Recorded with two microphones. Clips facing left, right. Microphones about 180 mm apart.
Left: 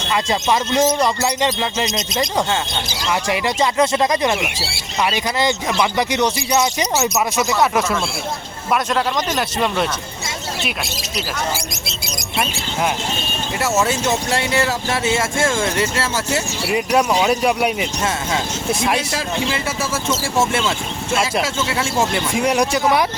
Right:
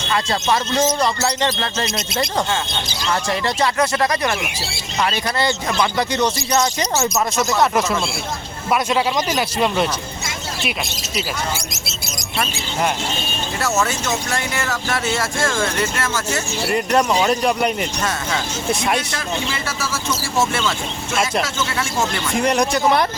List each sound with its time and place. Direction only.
0.1 s speech: 15° left (ahead or behind)
3.1 s speech: 15° left (ahead or behind)
7.1 s a man's voice: centre (ahead or behind)
11.5 s a man's voice: 5° right (ahead or behind)
13.8 s speech: 30° left (ahead or behind)
16.6 s a man's voice: 5° left (ahead or behind)
19.6 s speech: 25° left (ahead or behind)
22.4 s speech: 5° left (ahead or behind)